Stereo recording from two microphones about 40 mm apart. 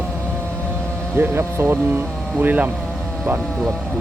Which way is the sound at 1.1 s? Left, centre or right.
Right.